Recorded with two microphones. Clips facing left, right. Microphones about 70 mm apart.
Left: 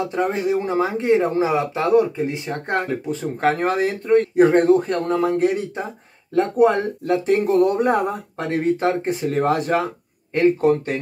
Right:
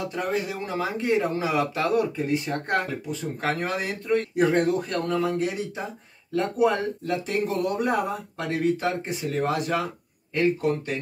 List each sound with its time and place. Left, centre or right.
0.0 s speech: left
2.9 s speech: left